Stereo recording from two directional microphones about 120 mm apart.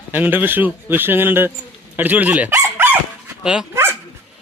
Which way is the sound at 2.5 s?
20° right (ahead or behind).